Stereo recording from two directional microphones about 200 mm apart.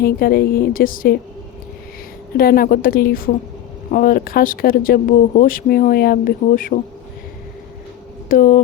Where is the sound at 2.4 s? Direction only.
50° left (ahead or behind).